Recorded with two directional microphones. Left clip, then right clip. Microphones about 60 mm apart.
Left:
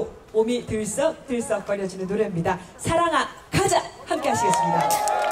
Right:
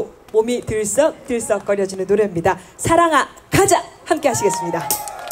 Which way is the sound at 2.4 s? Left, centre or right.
Right.